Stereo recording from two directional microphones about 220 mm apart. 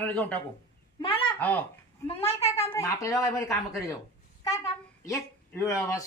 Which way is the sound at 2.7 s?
15° left (ahead or behind).